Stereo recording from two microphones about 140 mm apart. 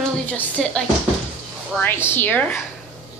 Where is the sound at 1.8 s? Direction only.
15° left (ahead or behind).